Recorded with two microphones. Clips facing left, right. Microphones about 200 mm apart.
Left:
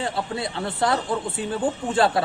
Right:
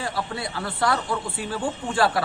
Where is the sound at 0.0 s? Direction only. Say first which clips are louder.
Left 2 dB; 25° left (ahead or behind).